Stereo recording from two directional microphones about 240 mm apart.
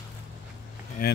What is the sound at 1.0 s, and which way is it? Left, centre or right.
Speech, left.